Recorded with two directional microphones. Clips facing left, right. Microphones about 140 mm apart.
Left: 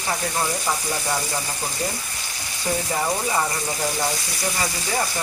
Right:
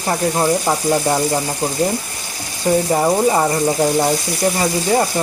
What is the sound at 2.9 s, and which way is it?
Speech, 35° right (ahead or behind).